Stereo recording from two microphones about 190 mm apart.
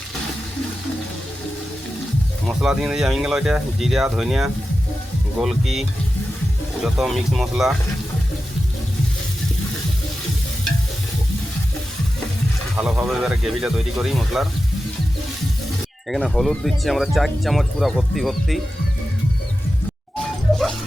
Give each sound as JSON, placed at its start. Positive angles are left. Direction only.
{"t": 2.5, "sound": "speech", "side_deg": 0}
{"t": 6.8, "sound": "speech", "side_deg": 0}
{"t": 12.7, "sound": "speech", "side_deg": -5}
{"t": 16.0, "sound": "speech", "side_deg": 0}